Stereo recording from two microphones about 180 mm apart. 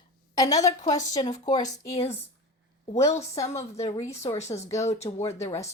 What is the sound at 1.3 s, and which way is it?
A woman's voice, 40° left (ahead or behind).